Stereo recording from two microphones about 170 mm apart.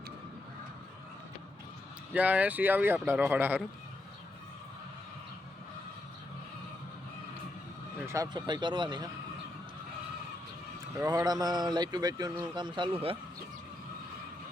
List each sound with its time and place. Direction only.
2.1 s speech: 10° right (ahead or behind)
8.0 s speech: 20° right (ahead or behind)
10.9 s speech: 20° right (ahead or behind)